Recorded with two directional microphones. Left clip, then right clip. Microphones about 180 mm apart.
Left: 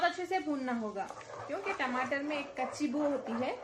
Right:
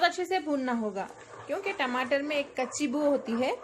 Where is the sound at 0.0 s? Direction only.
55° right (ahead or behind).